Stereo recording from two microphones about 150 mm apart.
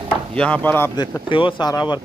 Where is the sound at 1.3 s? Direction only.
35° left (ahead or behind).